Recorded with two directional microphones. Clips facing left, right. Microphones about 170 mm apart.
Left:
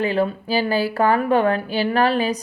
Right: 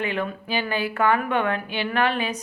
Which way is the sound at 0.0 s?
35° left (ahead or behind).